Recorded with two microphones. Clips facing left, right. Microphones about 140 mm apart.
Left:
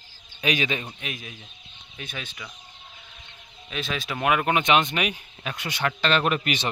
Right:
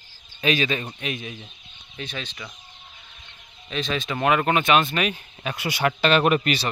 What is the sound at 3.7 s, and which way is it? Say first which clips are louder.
Speech: right 4 dB; 5° left (ahead or behind).